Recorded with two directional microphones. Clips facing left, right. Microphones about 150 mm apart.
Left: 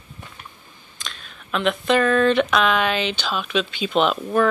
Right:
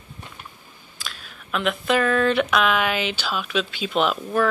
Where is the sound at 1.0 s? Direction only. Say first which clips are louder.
Even; 5° right (ahead or behind).